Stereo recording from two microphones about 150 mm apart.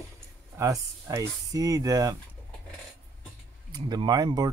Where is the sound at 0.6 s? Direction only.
20° right (ahead or behind).